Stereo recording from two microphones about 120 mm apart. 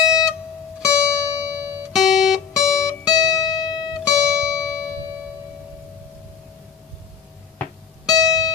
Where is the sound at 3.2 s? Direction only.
30° left (ahead or behind).